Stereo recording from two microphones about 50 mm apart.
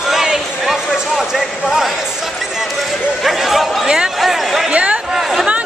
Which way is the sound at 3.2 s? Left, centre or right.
Centre.